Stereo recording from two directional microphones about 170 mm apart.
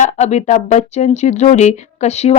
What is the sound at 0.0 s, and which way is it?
Speech, 40° left (ahead or behind).